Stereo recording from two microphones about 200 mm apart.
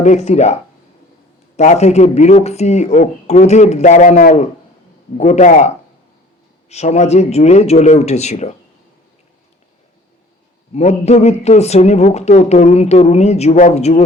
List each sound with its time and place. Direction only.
0.0 s a man's voice: 35° left (ahead or behind)
10.8 s a man's voice: 35° left (ahead or behind)